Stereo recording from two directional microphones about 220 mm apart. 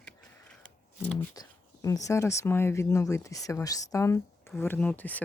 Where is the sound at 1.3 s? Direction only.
15° left (ahead or behind).